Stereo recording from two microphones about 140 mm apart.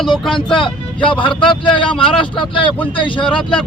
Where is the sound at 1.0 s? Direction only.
35° left (ahead or behind).